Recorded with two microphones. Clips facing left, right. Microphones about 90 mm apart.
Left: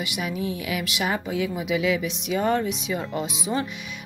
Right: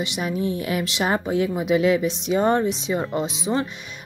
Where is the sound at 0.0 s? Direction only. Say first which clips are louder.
Right 4 dB; 30° right (ahead or behind).